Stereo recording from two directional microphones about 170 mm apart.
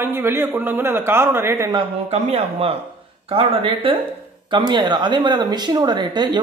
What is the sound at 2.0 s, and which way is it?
Speech, 35° right (ahead or behind).